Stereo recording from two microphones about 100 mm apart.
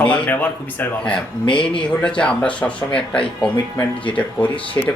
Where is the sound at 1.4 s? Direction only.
60° left (ahead or behind).